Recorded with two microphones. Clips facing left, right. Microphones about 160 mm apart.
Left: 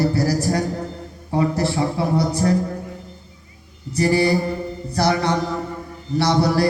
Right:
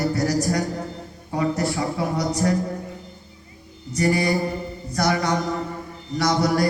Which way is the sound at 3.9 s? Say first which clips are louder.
Left 3 dB; 30° left (ahead or behind).